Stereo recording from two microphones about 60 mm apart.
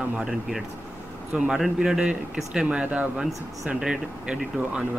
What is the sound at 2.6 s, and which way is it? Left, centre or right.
Speech, right.